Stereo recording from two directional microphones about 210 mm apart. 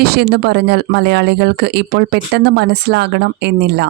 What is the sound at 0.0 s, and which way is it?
Speech, 50° right (ahead or behind).